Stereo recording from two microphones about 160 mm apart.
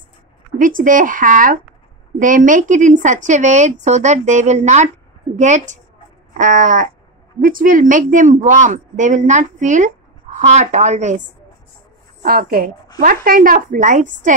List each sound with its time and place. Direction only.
0.6 s a woman's voice: 55° right (ahead or behind)
12.2 s a woman's voice: 65° right (ahead or behind)